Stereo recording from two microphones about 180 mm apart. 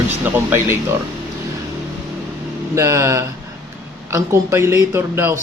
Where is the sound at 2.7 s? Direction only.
15° right (ahead or behind).